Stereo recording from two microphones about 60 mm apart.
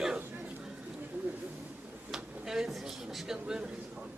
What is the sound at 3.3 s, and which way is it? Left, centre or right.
Speech, centre.